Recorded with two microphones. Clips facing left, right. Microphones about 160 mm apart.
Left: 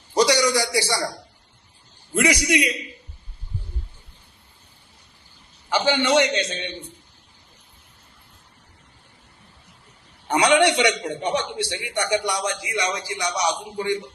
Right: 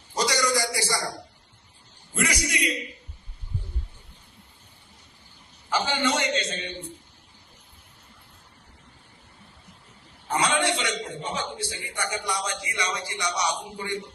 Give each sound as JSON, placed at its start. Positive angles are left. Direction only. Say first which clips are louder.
{"t": 0.1, "sound": "a man's voice", "louder": "left 6 dB", "side_deg": 75}
{"t": 2.1, "sound": "a man's voice", "louder": "left 8 dB", "side_deg": 80}
{"t": 5.6, "sound": "a man's voice", "louder": "left 5 dB", "side_deg": 80}
{"t": 10.2, "sound": "a man's voice", "louder": "left 7 dB", "side_deg": 80}